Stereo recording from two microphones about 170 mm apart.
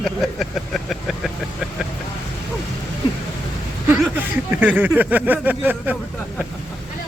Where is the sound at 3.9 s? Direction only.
10° right (ahead or behind).